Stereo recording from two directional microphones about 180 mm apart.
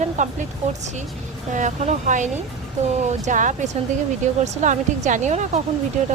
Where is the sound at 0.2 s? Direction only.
40° right (ahead or behind).